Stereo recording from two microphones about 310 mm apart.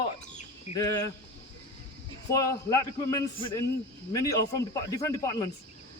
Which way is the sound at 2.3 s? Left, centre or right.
Centre.